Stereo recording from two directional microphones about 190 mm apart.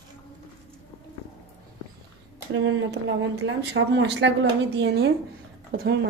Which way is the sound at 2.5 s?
75° right (ahead or behind).